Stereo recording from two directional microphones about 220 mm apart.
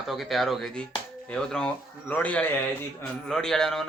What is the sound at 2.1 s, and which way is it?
A man's voice, 5° left (ahead or behind).